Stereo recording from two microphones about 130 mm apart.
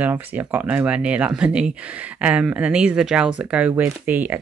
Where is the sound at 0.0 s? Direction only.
15° right (ahead or behind).